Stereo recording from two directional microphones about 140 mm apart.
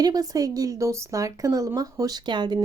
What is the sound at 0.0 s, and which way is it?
Speech, 25° right (ahead or behind).